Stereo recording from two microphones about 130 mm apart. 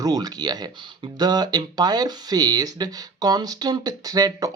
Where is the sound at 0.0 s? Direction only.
30° right (ahead or behind).